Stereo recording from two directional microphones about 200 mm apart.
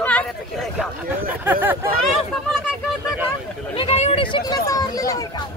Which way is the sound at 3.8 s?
30° left (ahead or behind).